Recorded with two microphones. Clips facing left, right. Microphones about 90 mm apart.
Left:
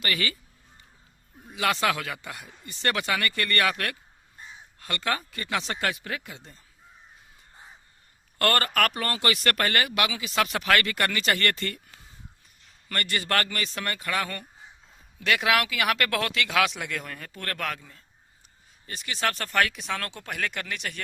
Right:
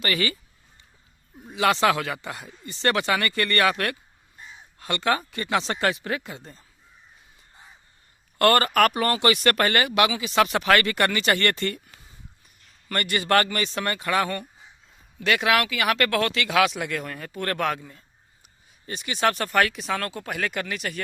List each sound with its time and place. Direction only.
0.0 s speech: 30° right (ahead or behind)
1.5 s speech: 30° right (ahead or behind)
6.3 s speech: 40° right (ahead or behind)
8.4 s speech: 15° right (ahead or behind)
9.2 s speech: 20° right (ahead or behind)
12.9 s speech: 15° right (ahead or behind)
15.2 s speech: centre (ahead or behind)
17.5 s speech: 25° right (ahead or behind)
19.5 s speech: 5° right (ahead or behind)